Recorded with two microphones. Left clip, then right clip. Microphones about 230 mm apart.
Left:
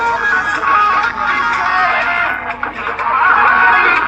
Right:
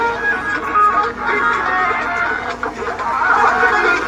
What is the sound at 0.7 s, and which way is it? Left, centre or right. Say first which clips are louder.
Music: left 1 dB; centre.